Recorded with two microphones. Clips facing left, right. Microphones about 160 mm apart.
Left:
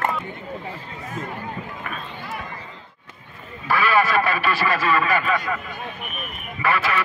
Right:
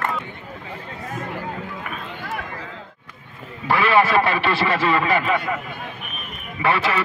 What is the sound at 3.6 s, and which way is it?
A man's voice, 25° right (ahead or behind).